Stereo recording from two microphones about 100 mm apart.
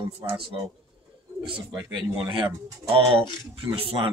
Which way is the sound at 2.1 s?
55° right (ahead or behind).